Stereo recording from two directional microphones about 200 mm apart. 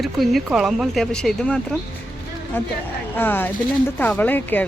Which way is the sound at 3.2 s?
10° left (ahead or behind).